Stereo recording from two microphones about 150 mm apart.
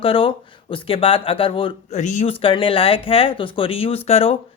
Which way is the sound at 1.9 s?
50° left (ahead or behind).